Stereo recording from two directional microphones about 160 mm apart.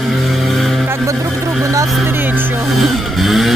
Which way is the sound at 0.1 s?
Centre (ahead or behind).